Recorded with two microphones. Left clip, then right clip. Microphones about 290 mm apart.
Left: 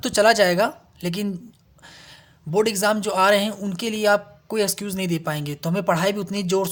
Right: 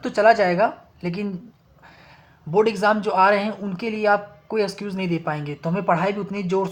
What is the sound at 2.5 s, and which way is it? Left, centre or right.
Speech, left.